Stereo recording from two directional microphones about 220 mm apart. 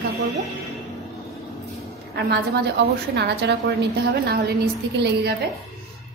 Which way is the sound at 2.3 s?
50° right (ahead or behind).